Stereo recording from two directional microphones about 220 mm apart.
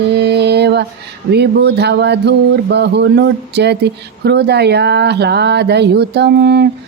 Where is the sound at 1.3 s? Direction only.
50° right (ahead or behind).